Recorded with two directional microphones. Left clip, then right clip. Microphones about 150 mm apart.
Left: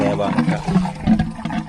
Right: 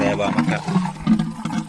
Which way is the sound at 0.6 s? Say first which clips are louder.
Left 2 dB; centre (ahead or behind).